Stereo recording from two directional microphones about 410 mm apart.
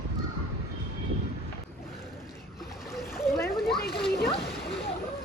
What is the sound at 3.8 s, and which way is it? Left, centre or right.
Splash, left.